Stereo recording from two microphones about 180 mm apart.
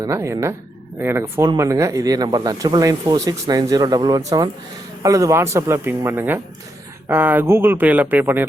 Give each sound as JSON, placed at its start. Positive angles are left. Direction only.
{"t": 0.0, "sound": "speech", "side_deg": -15}